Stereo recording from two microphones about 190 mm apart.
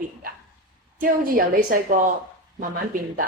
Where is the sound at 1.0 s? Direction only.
50° right (ahead or behind).